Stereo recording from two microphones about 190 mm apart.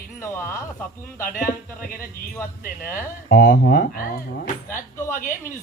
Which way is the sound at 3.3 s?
55° left (ahead or behind).